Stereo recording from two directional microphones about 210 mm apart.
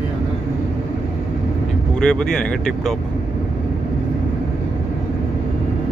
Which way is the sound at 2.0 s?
5° left (ahead or behind).